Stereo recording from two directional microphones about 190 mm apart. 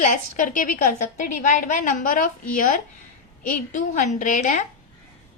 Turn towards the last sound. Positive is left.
turn(degrees=40)  # may be behind; listen again after turning